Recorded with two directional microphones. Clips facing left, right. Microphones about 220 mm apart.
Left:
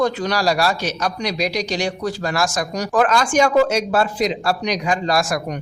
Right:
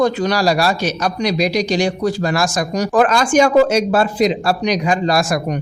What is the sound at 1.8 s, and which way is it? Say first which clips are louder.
A man's voice: right 5 dB; 10° right (ahead or behind).